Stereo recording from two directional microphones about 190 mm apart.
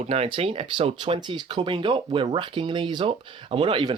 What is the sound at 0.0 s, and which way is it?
Speech, 30° right (ahead or behind).